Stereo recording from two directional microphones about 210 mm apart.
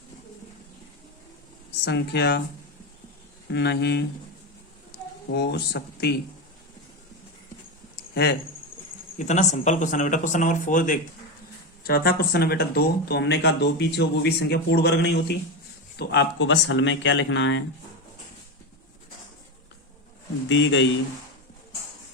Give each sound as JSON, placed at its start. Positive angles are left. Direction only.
{"t": 1.8, "sound": "speech", "side_deg": 55}
{"t": 3.5, "sound": "speech", "side_deg": 55}
{"t": 5.3, "sound": "speech", "side_deg": 50}
{"t": 8.1, "sound": "speech", "side_deg": 50}
{"t": 9.1, "sound": "speech", "side_deg": 35}
{"t": 20.5, "sound": "speech", "side_deg": 60}